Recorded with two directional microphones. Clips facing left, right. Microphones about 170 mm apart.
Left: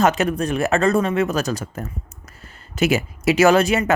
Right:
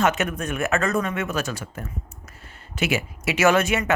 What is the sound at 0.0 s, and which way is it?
Speech, 35° left (ahead or behind).